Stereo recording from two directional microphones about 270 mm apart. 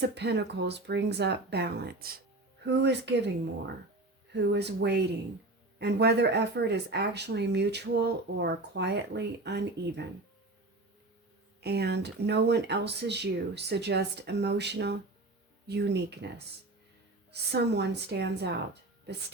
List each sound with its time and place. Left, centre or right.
0.1 s speech: right
11.6 s speech: right
17.3 s speech: right